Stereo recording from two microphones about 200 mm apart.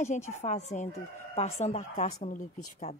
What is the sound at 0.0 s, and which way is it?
Speech, 35° left (ahead or behind).